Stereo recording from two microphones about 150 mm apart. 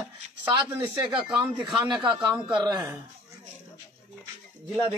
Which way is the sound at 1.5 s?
30° right (ahead or behind).